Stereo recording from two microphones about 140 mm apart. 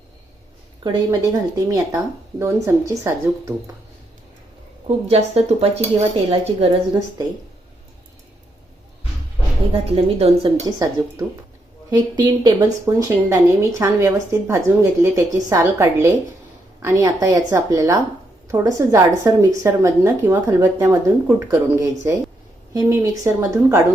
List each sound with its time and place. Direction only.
0.9 s speech: 25° right (ahead or behind)
5.0 s speech: 45° right (ahead or behind)
9.7 s speech: 45° right (ahead or behind)
10.8 s speech: 25° right (ahead or behind)
12.8 s speech: 20° right (ahead or behind)